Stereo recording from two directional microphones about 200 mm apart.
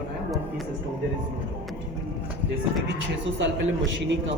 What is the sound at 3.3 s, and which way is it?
Speech, 65° right (ahead or behind).